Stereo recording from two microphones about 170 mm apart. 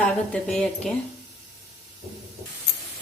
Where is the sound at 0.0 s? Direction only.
5° left (ahead or behind).